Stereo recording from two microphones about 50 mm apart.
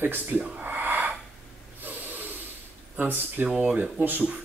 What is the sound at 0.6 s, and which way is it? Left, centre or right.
Gasp, right.